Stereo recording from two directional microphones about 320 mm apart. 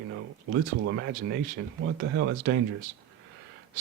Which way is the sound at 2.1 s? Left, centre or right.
Right.